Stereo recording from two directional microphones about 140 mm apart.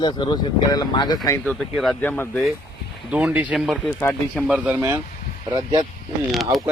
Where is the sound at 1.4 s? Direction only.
Centre (ahead or behind).